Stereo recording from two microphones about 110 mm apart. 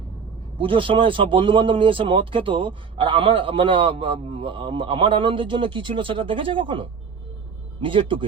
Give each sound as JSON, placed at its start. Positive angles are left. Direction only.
{"t": 0.6, "sound": "speech", "side_deg": -50}